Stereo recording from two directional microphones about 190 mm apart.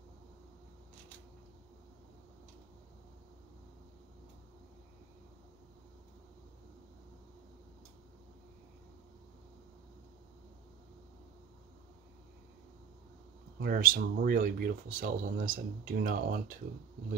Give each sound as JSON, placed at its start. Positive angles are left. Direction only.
{"t": 13.6, "sound": "speech", "side_deg": -50}